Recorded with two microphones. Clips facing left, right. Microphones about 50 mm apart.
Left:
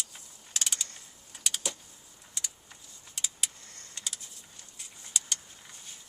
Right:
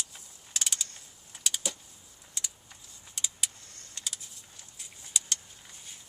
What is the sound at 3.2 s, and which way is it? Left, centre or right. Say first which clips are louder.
Vehicle: even; centre.